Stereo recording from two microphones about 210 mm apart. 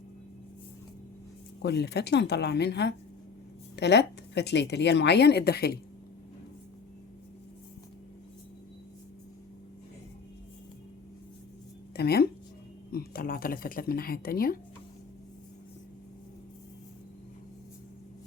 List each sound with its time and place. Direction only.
1.6 s speech: 55° left (ahead or behind)
11.9 s speech: 50° left (ahead or behind)